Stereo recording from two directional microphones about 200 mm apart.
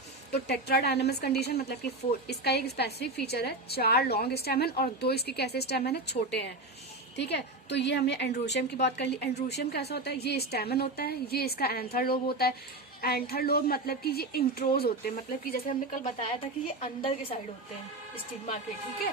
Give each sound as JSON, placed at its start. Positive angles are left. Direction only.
{"t": 0.3, "sound": "a woman's voice", "side_deg": 55}